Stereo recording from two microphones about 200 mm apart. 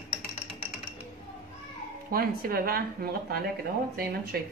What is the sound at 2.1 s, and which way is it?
Speech, 45° right (ahead or behind).